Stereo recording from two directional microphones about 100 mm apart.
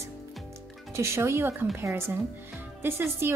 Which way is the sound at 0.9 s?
25° right (ahead or behind).